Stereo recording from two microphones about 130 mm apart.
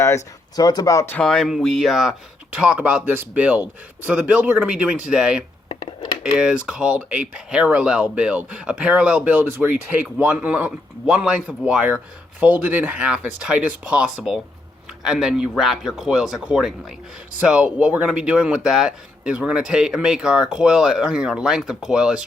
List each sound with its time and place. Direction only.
0.5 s speech: 30° left (ahead or behind)
1.1 s speech: 5° left (ahead or behind)